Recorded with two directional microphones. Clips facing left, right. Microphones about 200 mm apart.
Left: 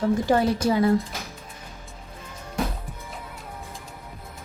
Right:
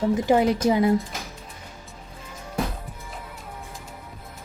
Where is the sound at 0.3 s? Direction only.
15° right (ahead or behind).